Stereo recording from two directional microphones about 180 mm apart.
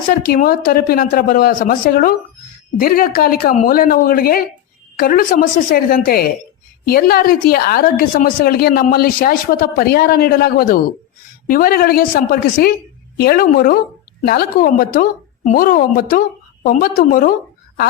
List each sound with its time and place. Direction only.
0.3 s a woman's voice: 55° left (ahead or behind)